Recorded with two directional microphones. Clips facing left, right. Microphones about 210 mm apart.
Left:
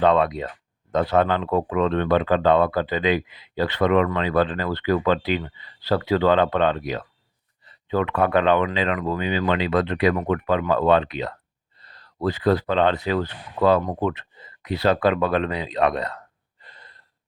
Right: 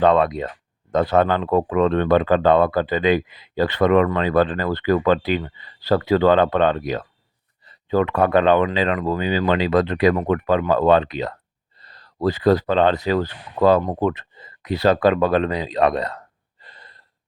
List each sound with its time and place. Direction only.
0.0 s speech: 45° right (ahead or behind)